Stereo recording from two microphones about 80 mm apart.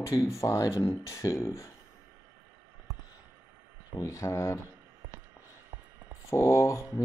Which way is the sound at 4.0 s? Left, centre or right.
Left.